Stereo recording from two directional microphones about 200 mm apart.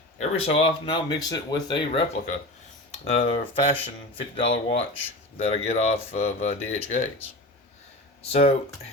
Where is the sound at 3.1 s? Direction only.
30° left (ahead or behind).